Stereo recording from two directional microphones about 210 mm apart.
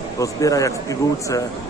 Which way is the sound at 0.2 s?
15° left (ahead or behind).